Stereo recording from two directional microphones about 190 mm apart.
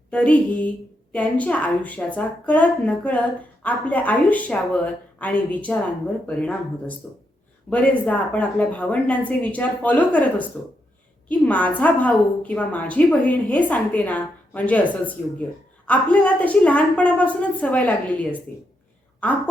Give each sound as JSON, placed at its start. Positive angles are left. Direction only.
{"t": 0.1, "sound": "a woman's voice", "side_deg": 5}